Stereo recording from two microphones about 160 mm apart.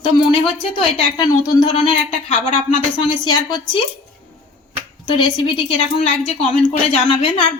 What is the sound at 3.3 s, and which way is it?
Speech, 25° left (ahead or behind).